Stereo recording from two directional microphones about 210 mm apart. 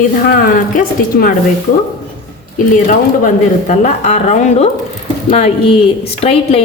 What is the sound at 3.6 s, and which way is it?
A woman's voice, 35° left (ahead or behind).